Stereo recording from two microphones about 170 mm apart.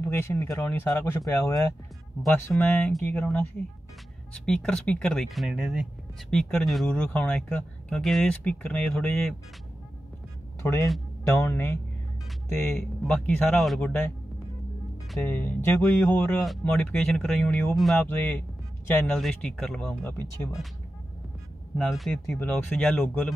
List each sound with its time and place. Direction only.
0.0 s speech: 15° left (ahead or behind)
2.5 s speech: 5° left (ahead or behind)
10.6 s speech: 15° left (ahead or behind)
15.1 s speech: 10° left (ahead or behind)
21.7 s speech: 5° left (ahead or behind)